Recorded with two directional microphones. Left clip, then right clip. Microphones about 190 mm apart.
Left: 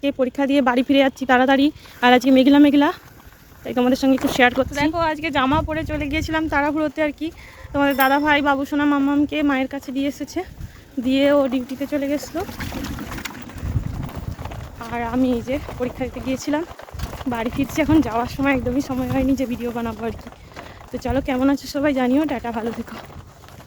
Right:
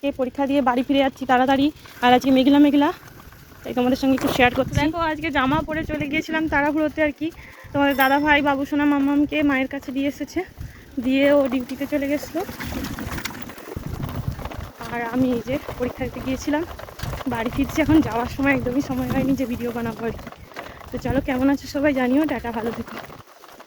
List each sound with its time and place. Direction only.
0.0 s speech: 45° left (ahead or behind); by 12.3 s 25° left (ahead or behind)
12.5 s speech: 10° right (ahead or behind)
13.1 s pigeon: 35° right (ahead or behind)
14.1 s boat: 35° right (ahead or behind)
14.9 s speech: 20° left (ahead or behind)
17.0 s a sound: 45° right (ahead or behind)
17.6 s speech: 25° left (ahead or behind)